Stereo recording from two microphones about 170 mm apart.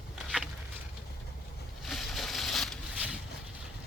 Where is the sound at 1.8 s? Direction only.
Centre (ahead or behind).